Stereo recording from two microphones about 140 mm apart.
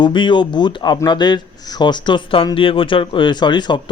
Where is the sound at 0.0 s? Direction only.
35° left (ahead or behind).